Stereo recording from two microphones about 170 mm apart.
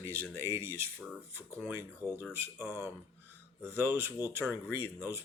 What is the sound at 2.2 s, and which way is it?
Speech, 15° right (ahead or behind).